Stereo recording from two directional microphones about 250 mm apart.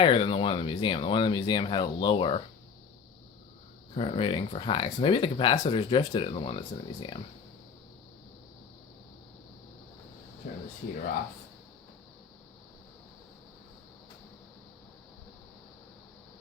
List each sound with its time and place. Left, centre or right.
0.0 s speech: centre
3.9 s speech: left